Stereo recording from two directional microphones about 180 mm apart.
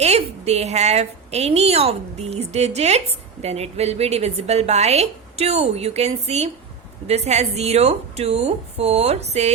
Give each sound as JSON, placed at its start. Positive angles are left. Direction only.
{"t": 0.0, "sound": "a woman's voice", "side_deg": -35}